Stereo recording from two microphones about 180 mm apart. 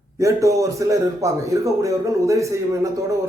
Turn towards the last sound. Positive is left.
turn(degrees=-15)  # may be behind; listen again after turning